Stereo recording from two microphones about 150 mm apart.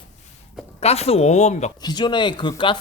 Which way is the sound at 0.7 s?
45° left (ahead or behind).